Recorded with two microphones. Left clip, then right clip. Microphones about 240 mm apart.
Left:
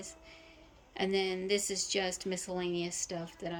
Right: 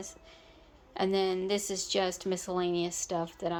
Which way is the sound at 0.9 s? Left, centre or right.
Centre.